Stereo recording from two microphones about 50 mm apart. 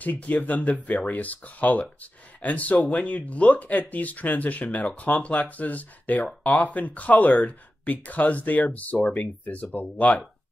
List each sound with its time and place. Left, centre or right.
0.0 s speech: left
8.9 s speech: left
9.2 s speech: left